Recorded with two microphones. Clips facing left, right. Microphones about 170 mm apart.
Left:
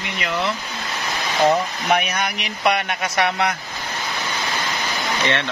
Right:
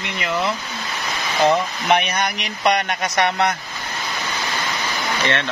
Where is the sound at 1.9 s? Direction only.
5° left (ahead or behind).